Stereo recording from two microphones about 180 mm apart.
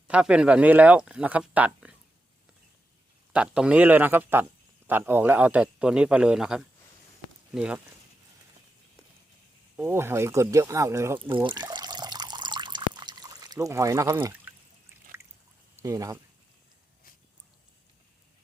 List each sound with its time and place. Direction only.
0.1 s speech: 5° right (ahead or behind)
3.3 s a man's voice: 5° right (ahead or behind)
9.7 s speech: 15° right (ahead or behind)
11.3 s water: 25° right (ahead or behind)
15.8 s speech: 15° right (ahead or behind)